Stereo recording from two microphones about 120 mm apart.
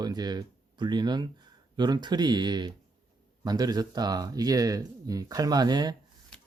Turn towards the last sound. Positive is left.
turn(degrees=-35)  # may be behind; listen again after turning